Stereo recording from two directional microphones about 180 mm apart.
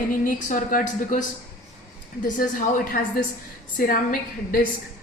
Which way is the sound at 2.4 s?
50° left (ahead or behind).